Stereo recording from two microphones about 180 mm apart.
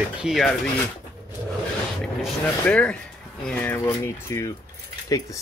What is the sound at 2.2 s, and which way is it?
Speech, 5° left (ahead or behind).